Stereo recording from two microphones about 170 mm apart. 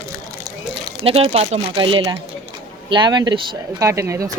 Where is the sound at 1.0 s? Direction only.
35° right (ahead or behind).